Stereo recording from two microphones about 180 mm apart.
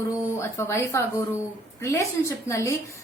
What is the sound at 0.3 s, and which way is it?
A woman's voice, 15° left (ahead or behind).